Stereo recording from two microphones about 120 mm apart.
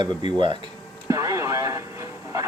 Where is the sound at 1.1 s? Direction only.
25° right (ahead or behind).